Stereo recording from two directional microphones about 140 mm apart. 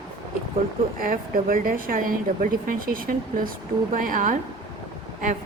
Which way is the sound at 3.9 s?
75° right (ahead or behind).